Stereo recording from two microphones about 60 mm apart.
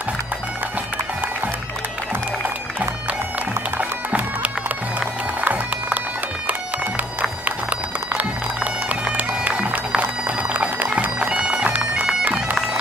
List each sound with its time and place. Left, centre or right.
5.4 s music: right
8.8 s bagpipes: right